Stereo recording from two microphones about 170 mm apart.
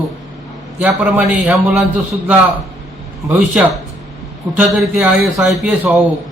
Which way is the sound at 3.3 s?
10° right (ahead or behind).